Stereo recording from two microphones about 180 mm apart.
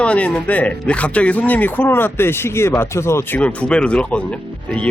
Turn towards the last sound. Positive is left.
turn(degrees=5)  # may be behind; listen again after turning